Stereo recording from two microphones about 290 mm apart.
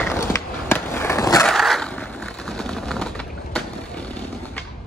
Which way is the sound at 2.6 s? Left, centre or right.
Centre.